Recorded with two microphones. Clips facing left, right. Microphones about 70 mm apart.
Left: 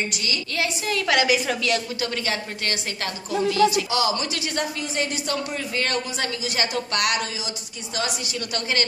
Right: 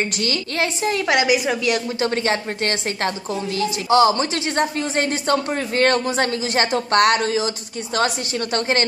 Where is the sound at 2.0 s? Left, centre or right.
Right.